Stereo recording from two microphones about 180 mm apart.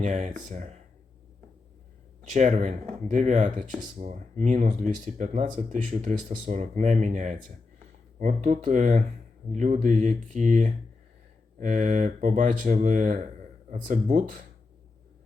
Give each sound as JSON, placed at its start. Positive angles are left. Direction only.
{"t": 0.0, "sound": "speech", "side_deg": -40}
{"t": 2.3, "sound": "speech", "side_deg": -45}